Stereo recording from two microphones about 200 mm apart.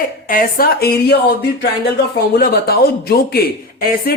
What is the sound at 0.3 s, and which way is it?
A man's voice, 45° left (ahead or behind).